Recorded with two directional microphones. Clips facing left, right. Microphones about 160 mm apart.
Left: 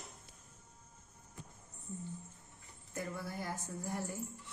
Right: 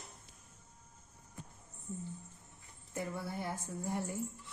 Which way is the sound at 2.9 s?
25° right (ahead or behind).